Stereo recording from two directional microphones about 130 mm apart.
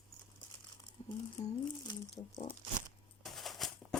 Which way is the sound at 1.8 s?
30° left (ahead or behind).